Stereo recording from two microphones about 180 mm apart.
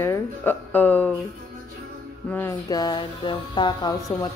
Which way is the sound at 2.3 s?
15° left (ahead or behind).